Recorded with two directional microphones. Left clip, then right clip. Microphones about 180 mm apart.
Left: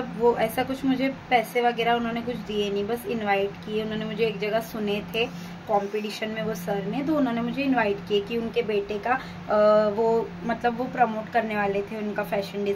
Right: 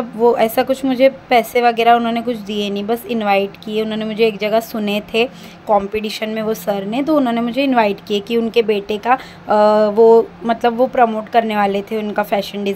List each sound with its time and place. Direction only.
0.4 s a woman's voice: 55° right (ahead or behind)